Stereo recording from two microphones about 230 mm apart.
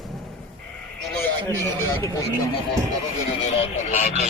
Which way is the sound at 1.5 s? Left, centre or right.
Centre.